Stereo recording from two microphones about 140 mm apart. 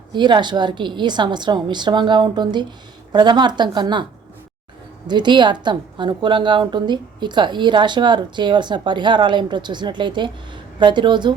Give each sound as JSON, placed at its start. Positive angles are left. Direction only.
{"t": 0.1, "sound": "a woman's voice", "side_deg": -35}
{"t": 5.0, "sound": "a woman's voice", "side_deg": -35}